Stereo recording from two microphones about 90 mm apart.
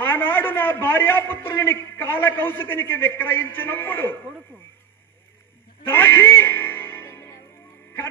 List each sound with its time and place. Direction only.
0.0 s a man's voice: 25° left (ahead or behind)
5.9 s music: 25° left (ahead or behind)